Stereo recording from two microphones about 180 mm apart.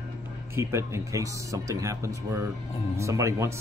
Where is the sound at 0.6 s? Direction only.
15° right (ahead or behind).